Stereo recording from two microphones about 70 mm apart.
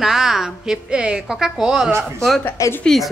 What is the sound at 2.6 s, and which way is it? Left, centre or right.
Speech, left.